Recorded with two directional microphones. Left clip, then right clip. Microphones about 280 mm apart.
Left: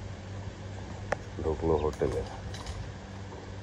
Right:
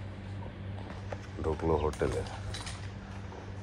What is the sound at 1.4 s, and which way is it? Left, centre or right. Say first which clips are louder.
Speech: left 1 dB; right.